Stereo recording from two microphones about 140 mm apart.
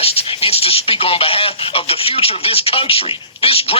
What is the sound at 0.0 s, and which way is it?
Speech, 45° left (ahead or behind).